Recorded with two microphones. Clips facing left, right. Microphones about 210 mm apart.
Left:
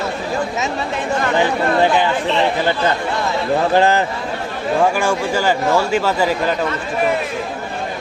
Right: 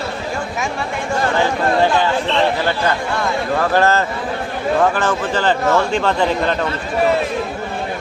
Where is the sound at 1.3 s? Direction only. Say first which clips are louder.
Left 1 dB; 15° left (ahead or behind).